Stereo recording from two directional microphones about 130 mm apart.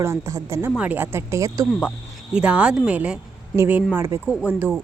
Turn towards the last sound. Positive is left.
turn(degrees=-15)  # may be behind; listen again after turning